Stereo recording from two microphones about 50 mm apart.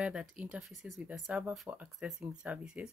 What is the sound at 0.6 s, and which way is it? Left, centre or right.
Speech, centre.